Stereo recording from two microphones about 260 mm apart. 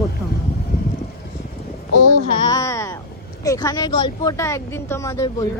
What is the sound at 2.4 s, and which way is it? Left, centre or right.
Speech, centre.